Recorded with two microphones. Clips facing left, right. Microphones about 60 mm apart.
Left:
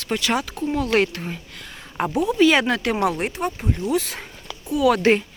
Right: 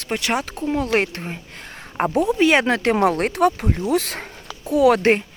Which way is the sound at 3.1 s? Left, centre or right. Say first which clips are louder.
Right 7 dB; right.